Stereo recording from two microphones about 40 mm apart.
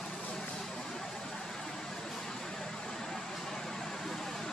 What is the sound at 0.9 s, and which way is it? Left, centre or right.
Vehicle, centre.